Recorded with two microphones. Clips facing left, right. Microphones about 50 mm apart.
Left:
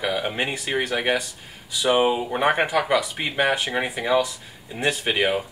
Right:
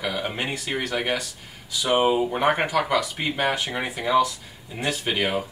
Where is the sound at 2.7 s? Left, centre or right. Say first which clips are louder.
Left 1 dB; left.